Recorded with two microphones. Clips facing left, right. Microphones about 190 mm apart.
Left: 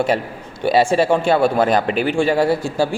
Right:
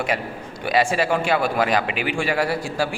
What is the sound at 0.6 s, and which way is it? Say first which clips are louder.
A man's voice: left 5 dB; 30° left (ahead or behind).